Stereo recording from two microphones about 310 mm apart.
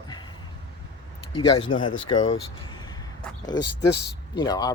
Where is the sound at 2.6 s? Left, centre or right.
Centre.